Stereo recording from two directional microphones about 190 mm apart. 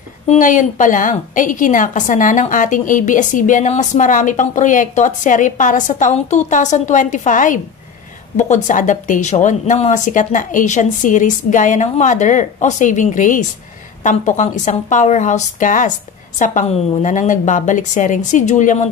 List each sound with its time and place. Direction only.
0.3 s a woman's voice: 40° left (ahead or behind)